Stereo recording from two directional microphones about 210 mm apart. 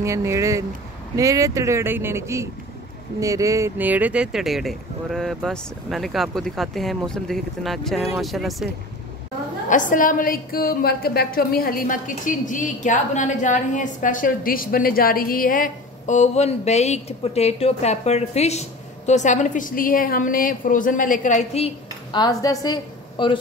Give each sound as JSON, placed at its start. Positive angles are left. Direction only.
{"t": 0.0, "sound": "speech", "side_deg": -15}
{"t": 9.7, "sound": "a woman's voice", "side_deg": 40}